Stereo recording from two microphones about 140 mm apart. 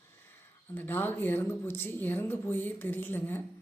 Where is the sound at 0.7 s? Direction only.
15° left (ahead or behind).